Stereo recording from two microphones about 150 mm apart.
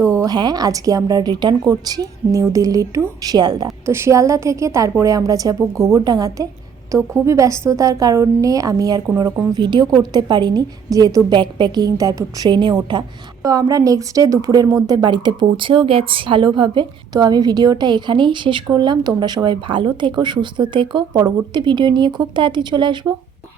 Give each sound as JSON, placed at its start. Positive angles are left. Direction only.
{"t": 0.0, "sound": "a woman's voice", "side_deg": -20}